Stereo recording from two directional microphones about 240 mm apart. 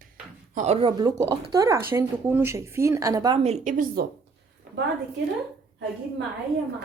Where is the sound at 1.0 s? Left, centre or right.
Centre; by 4.0 s right.